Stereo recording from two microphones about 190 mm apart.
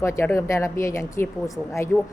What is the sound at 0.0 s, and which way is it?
Speech, 15° left (ahead or behind).